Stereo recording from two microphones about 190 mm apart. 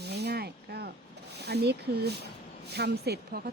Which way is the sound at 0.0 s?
60° right (ahead or behind).